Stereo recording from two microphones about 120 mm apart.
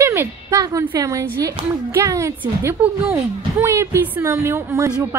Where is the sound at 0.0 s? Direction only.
20° right (ahead or behind).